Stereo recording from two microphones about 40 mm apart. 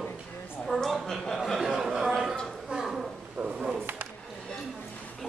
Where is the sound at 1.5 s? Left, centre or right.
Centre.